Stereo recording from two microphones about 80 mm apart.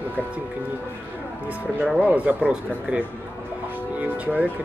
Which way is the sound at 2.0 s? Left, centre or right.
Centre.